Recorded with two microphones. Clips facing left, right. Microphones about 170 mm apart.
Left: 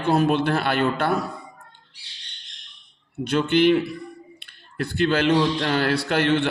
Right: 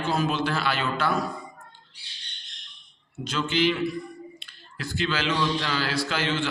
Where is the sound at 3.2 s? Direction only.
60° left (ahead or behind).